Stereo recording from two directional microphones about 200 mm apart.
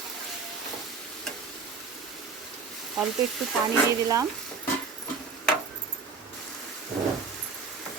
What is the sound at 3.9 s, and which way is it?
Speech, 15° right (ahead or behind).